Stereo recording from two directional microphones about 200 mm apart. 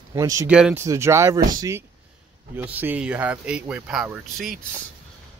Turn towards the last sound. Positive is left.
turn(degrees=0)  # may be behind; listen again after turning